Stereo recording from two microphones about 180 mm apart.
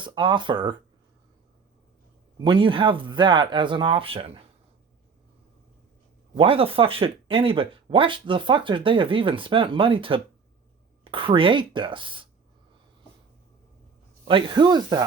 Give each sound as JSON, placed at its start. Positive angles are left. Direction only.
{"t": 0.0, "sound": "speech", "side_deg": -25}
{"t": 2.4, "sound": "speech", "side_deg": -25}
{"t": 6.3, "sound": "speech", "side_deg": -30}
{"t": 14.3, "sound": "speech", "side_deg": -25}